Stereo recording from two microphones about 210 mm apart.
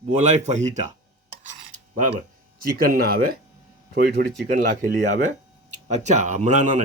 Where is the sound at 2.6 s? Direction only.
45° right (ahead or behind).